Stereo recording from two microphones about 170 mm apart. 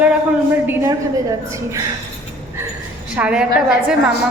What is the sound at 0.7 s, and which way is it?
Speech, 15° right (ahead or behind).